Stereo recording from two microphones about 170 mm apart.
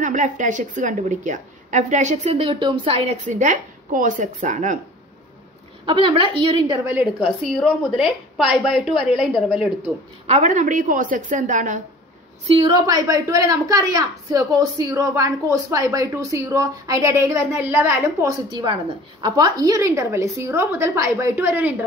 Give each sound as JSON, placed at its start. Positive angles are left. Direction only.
{"t": 0.0, "sound": "a woman's voice", "side_deg": -50}
{"t": 3.3, "sound": "a woman's voice", "side_deg": -50}
{"t": 5.9, "sound": "a woman's voice", "side_deg": -30}
{"t": 6.9, "sound": "a woman's voice", "side_deg": -5}
{"t": 10.2, "sound": "a woman's voice", "side_deg": -40}
{"t": 12.4, "sound": "a woman's voice", "side_deg": -30}